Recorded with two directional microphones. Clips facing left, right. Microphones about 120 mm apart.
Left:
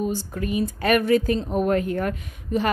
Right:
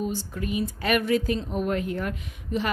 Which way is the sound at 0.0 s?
45° left (ahead or behind).